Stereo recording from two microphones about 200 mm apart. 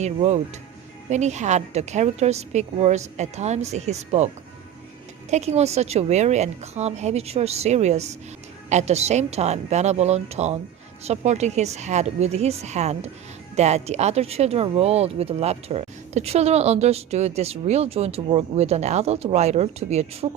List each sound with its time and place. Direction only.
0.0 s speech: 35° right (ahead or behind)
5.3 s speech: 35° right (ahead or behind)